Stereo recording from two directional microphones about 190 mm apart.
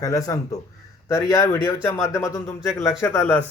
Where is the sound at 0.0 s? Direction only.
20° left (ahead or behind).